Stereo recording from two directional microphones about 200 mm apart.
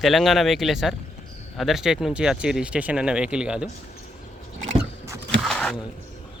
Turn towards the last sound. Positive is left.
turn(degrees=0)  # may be behind; listen again after turning